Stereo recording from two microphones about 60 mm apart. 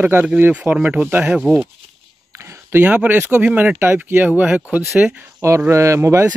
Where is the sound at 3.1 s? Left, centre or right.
Right.